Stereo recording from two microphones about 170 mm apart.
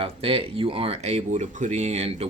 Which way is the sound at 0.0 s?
35° right (ahead or behind).